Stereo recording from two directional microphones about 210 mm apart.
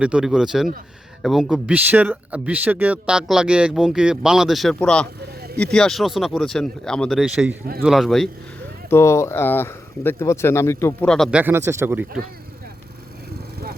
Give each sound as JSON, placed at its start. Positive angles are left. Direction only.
{"t": 0.0, "sound": "speech", "side_deg": -5}
{"t": 8.9, "sound": "speech", "side_deg": 15}